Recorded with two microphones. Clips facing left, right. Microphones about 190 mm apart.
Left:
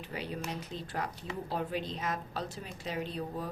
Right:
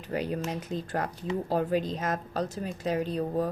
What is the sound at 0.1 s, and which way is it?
Speech, 45° right (ahead or behind).